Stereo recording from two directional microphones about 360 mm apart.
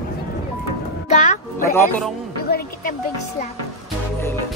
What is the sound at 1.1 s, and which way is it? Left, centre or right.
Speech, centre.